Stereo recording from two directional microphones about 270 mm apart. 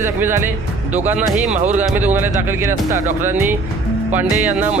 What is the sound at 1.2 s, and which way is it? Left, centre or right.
Speech, right.